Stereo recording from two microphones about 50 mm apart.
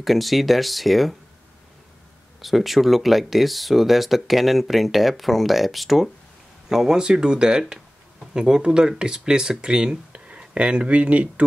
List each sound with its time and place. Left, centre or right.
0.0 s speech: centre
2.4 s speech: centre; by 11.4 s right